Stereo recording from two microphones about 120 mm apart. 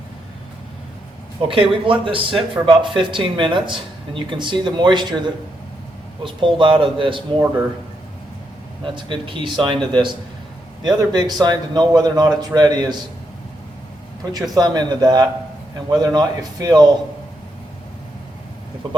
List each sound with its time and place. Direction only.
1.7 s speech: 45° right (ahead or behind)
8.8 s speech: 45° right (ahead or behind)
14.5 s speech: 35° right (ahead or behind)